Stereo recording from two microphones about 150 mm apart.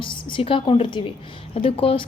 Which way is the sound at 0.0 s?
35° left (ahead or behind).